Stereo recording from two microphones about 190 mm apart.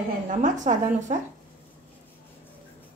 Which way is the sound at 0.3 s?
40° right (ahead or behind).